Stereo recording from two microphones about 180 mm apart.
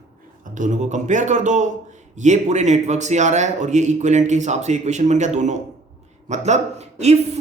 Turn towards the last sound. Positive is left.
turn(degrees=-40)  # may be behind; listen again after turning